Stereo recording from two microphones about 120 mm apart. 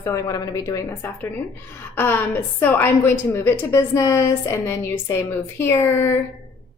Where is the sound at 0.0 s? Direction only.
25° left (ahead or behind).